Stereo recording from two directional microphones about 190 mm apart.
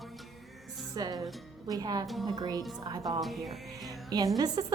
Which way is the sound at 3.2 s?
Centre (ahead or behind).